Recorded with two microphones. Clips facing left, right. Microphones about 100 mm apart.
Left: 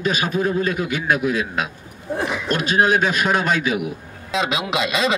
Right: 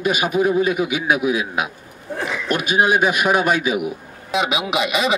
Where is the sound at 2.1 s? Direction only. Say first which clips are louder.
Left 2 dB; 15° left (ahead or behind).